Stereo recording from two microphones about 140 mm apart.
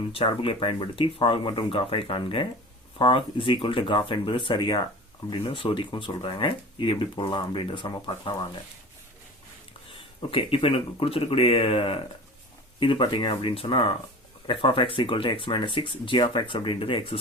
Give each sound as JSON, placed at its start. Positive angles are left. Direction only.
{"t": 0.1, "sound": "speech", "side_deg": 40}
{"t": 9.9, "sound": "speech", "side_deg": 40}